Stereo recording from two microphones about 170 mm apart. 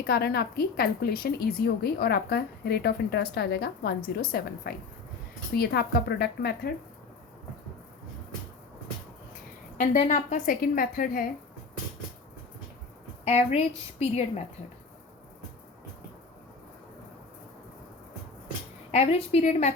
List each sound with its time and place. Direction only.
0.1 s a woman's voice: 65° left (ahead or behind)
9.7 s a woman's voice: 50° left (ahead or behind)
13.2 s a woman's voice: 40° left (ahead or behind)
18.9 s a woman's voice: 40° left (ahead or behind)